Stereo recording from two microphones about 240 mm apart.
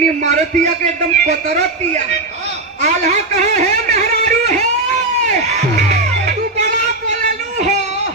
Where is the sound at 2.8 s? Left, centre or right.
Right.